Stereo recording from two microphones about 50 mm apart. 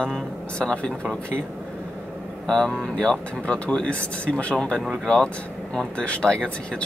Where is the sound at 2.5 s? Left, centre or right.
Centre.